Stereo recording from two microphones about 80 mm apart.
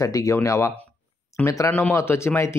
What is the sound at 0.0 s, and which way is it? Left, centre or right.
Speech, left.